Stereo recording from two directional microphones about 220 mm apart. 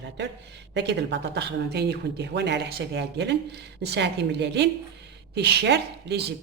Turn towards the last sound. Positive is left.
turn(degrees=-50)  # may be behind; listen again after turning